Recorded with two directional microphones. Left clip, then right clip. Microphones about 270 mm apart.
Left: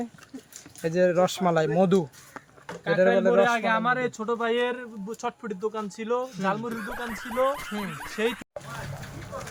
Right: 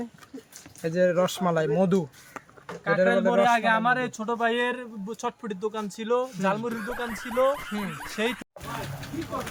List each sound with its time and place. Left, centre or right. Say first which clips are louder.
0.8 s speech: left 1 dB; left
2.6 s a sound: left 1 dB; centre
3.2 s speech: left 1 dB; centre
3.5 s speech: right 2 dB; centre
6.7 s speech: right 1 dB; centre
9.2 s vehicle: right 8 dB; right